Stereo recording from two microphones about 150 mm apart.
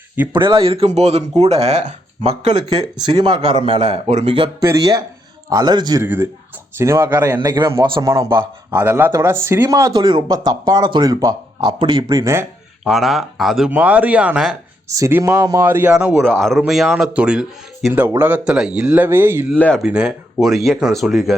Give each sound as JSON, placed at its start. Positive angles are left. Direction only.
{"t": 0.3, "sound": "a man's voice", "side_deg": -35}
{"t": 3.1, "sound": "a man's voice", "side_deg": -30}
{"t": 4.6, "sound": "speech", "side_deg": -20}
{"t": 6.0, "sound": "speech", "side_deg": -15}
{"t": 7.4, "sound": "speech", "side_deg": -25}
{"t": 12.8, "sound": "speech", "side_deg": 0}
{"t": 14.8, "sound": "speech", "side_deg": -20}
{"t": 15.6, "sound": "speech", "side_deg": -10}
{"t": 19.5, "sound": "speech", "side_deg": 10}
{"t": 19.8, "sound": "speech", "side_deg": -5}